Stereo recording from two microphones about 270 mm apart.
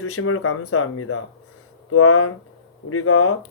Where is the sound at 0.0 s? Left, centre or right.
Left.